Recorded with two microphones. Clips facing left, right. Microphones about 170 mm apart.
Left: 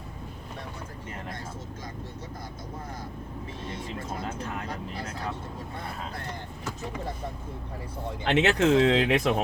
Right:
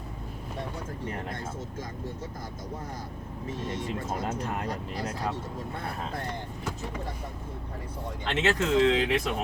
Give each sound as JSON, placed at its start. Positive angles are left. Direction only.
{"t": 4.3, "sound": "speech", "side_deg": -40}
{"t": 8.3, "sound": "speech", "side_deg": 65}